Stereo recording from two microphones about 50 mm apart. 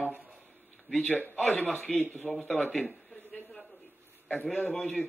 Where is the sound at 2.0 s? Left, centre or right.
Left.